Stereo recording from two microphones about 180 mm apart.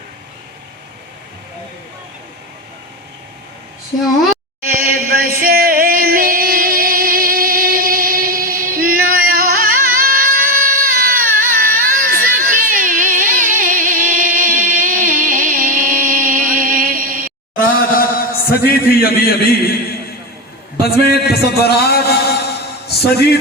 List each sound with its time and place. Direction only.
4.7 s singing: 55° right (ahead or behind)
17.6 s chant: 55° left (ahead or behind)
20.8 s a sound: 60° left (ahead or behind)
23.1 s a man's voice: 65° left (ahead or behind)